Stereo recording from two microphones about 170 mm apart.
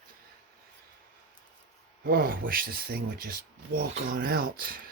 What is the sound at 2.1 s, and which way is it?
Speech, 60° right (ahead or behind).